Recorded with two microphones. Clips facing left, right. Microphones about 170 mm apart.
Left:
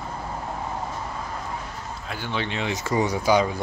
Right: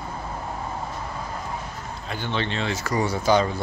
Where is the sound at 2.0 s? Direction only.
10° left (ahead or behind).